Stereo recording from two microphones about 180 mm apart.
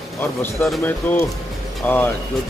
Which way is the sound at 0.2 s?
5° left (ahead or behind).